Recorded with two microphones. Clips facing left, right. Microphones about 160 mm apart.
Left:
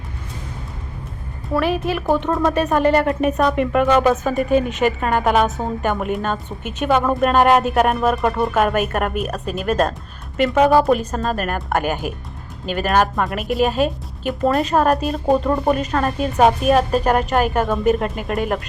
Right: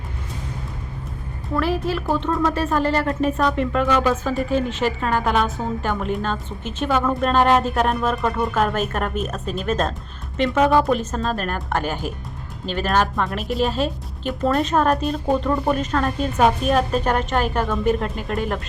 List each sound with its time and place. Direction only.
1.5 s speech: 15° left (ahead or behind)
15.4 s speech: 20° left (ahead or behind)
15.7 s speech: 10° left (ahead or behind)